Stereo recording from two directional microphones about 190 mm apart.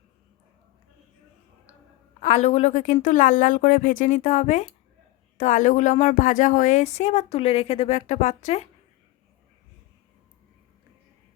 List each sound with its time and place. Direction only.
2.2 s speech: 35° left (ahead or behind)